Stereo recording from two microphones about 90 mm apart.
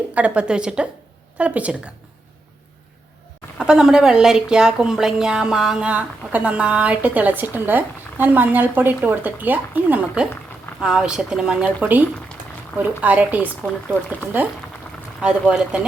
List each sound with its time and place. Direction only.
0.1 s speech: 15° right (ahead or behind)
3.6 s speech: 10° right (ahead or behind)
10.8 s speech: 5° right (ahead or behind)
15.2 s speech: 10° right (ahead or behind)